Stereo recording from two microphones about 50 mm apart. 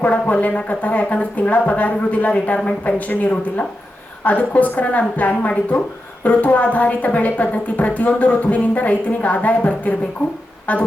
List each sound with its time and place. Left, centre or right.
0.0 s a woman's voice: left